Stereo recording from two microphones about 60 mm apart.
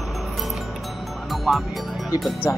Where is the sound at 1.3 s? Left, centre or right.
Centre.